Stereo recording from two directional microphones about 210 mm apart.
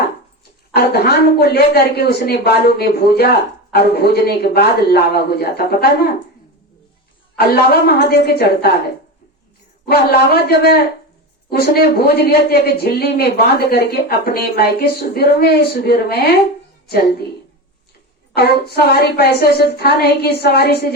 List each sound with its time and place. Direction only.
0.7 s speech: 50° left (ahead or behind)
7.3 s speech: 50° left (ahead or behind)
9.8 s speech: 50° left (ahead or behind)
18.3 s speech: 50° left (ahead or behind)